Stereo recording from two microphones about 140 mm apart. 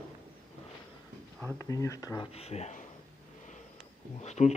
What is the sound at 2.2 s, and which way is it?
Speech, 45° left (ahead or behind).